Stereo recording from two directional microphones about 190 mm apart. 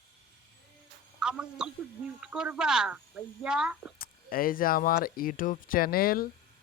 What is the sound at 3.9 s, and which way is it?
Speech, 50° left (ahead or behind).